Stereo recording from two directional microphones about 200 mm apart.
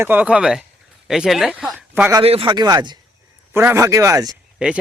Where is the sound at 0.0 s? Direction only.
10° right (ahead or behind).